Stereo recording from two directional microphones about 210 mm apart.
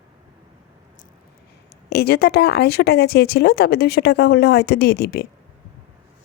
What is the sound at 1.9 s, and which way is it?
Speech, 50° left (ahead or behind).